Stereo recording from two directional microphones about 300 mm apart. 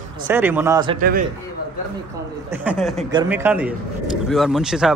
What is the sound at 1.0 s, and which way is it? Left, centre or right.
Speech, right.